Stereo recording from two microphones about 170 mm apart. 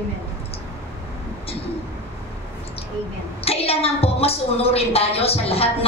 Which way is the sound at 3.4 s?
35° left (ahead or behind).